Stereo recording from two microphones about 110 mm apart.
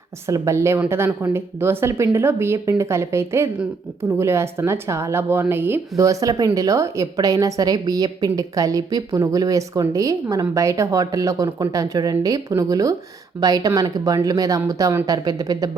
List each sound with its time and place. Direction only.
0.3 s speech: 30° right (ahead or behind)
6.0 s a woman's voice: 30° right (ahead or behind)